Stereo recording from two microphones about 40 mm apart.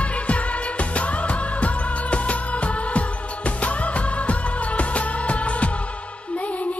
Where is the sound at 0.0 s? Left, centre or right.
Left.